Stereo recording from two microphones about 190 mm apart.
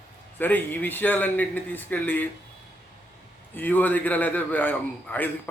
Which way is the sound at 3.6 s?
10° left (ahead or behind).